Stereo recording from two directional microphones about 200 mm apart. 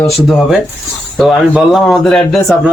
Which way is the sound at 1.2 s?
Centre (ahead or behind).